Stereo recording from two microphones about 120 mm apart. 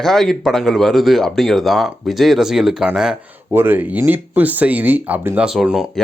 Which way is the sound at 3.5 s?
15° right (ahead or behind).